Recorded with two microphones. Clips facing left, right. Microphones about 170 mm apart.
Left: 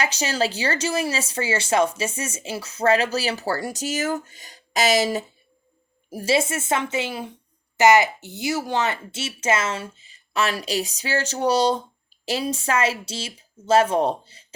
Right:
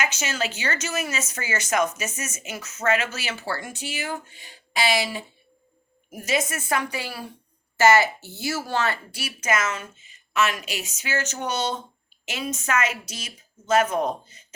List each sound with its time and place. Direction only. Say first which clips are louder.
0.0 s a woman's voice: left 4 dB; 35° left (ahead or behind)